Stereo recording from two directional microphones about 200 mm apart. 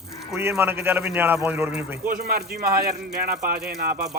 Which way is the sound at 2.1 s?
50° right (ahead or behind).